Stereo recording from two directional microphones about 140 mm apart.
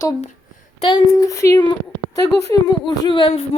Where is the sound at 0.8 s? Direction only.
35° left (ahead or behind).